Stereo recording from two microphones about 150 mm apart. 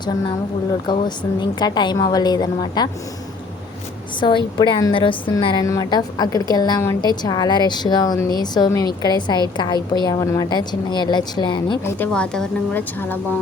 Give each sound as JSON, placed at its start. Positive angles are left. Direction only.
{"t": 0.9, "sound": "a woman's voice", "side_deg": 30}
{"t": 4.2, "sound": "a woman's voice", "side_deg": 30}
{"t": 11.9, "sound": "speech", "side_deg": 10}